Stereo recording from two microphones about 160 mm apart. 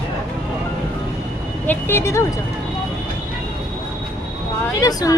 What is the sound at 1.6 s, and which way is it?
Speech, 15° left (ahead or behind).